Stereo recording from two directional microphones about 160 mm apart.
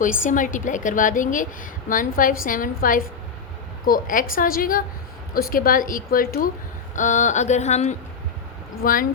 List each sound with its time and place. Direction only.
0.3 s a woman's voice: 55° left (ahead or behind)
6.9 s a woman's voice: 50° left (ahead or behind)
8.8 s a woman's voice: 60° left (ahead or behind)